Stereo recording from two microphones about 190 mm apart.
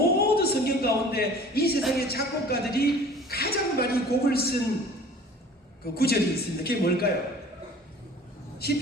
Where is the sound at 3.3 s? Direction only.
55° left (ahead or behind).